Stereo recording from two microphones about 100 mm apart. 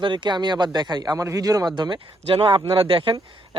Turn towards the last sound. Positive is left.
turn(degrees=-65)  # may be behind; listen again after turning